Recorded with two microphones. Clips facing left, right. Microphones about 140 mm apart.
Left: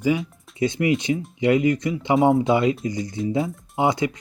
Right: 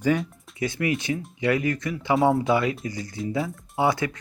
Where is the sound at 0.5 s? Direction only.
20° left (ahead or behind).